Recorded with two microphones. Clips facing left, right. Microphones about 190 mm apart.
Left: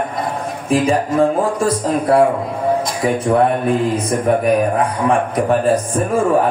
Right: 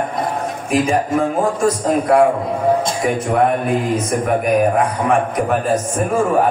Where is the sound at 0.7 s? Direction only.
35° left (ahead or behind).